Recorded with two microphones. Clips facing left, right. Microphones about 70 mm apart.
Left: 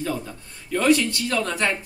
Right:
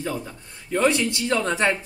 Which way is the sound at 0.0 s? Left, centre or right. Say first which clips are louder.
Left 1 dB; centre.